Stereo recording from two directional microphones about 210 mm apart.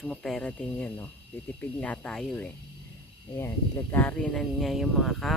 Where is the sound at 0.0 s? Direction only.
5° left (ahead or behind).